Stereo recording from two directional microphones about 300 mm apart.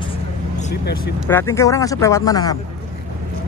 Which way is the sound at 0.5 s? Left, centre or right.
Left.